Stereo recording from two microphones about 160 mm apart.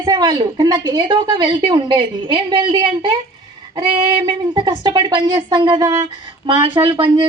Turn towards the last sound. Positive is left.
turn(degrees=-25)  # may be behind; listen again after turning